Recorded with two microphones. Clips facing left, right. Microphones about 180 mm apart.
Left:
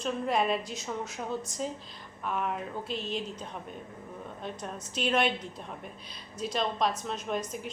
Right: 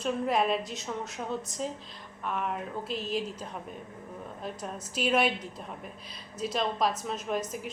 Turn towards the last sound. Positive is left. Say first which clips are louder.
# right 1 dB
turn(degrees=-5)  # may be behind; listen again after turning